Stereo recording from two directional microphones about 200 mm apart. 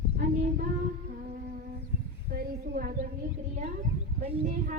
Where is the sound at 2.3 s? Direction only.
50° right (ahead or behind).